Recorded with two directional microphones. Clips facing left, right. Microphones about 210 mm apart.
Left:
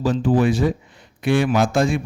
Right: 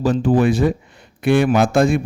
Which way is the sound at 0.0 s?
55° right (ahead or behind).